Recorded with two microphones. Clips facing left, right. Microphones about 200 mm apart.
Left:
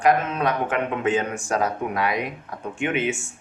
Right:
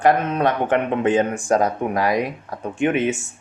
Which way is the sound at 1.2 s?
30° right (ahead or behind).